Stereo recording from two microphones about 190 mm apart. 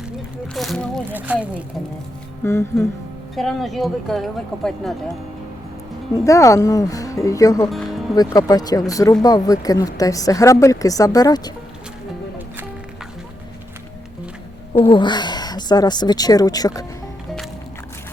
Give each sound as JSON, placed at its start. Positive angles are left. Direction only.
{"t": 0.5, "sound": "a sound", "side_deg": 0}
{"t": 1.1, "sound": "speech", "side_deg": -5}
{"t": 2.4, "sound": "speech", "side_deg": 15}
{"t": 3.3, "sound": "speech", "side_deg": 0}
{"t": 6.1, "sound": "speech", "side_deg": 15}
{"t": 7.7, "sound": "music", "side_deg": 0}
{"t": 8.1, "sound": "speech", "side_deg": 20}
{"t": 14.7, "sound": "speech", "side_deg": 25}